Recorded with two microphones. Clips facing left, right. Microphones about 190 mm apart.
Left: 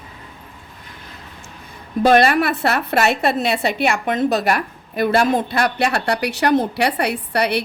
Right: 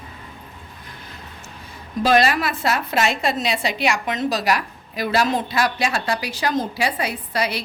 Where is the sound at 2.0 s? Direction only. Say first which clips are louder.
Left 4 dB; 55° left (ahead or behind).